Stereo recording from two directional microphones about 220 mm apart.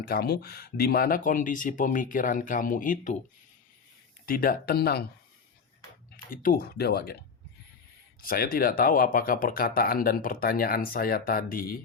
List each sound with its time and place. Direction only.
0.1 s speech: 45° left (ahead or behind)
4.3 s speech: 40° left (ahead or behind)
6.1 s speech: 40° left (ahead or behind)
8.2 s speech: 40° left (ahead or behind)